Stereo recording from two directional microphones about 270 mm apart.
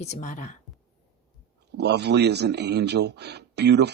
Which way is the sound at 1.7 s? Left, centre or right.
Right.